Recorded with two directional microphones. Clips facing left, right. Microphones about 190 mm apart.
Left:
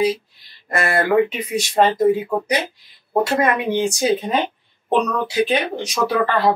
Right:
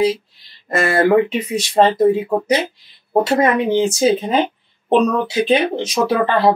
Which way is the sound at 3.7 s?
25° right (ahead or behind).